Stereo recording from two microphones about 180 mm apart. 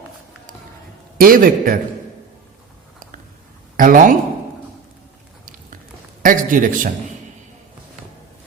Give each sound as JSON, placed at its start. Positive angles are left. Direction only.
{"t": 1.2, "sound": "speech", "side_deg": -50}
{"t": 3.8, "sound": "speech", "side_deg": -50}
{"t": 6.2, "sound": "speech", "side_deg": -50}